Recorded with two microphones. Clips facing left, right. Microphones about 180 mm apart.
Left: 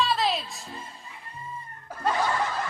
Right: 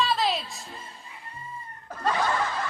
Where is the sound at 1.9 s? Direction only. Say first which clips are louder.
Even; 10° left (ahead or behind).